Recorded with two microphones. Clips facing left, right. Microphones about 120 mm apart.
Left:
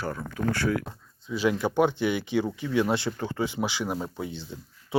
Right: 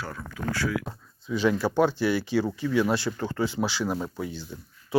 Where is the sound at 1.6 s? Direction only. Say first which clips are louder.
Even; 20° left (ahead or behind).